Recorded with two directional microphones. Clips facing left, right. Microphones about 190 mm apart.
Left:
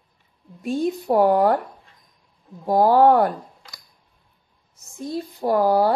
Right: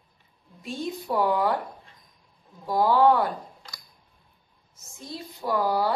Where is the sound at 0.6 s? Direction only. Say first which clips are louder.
Left 9 dB; 50° left (ahead or behind).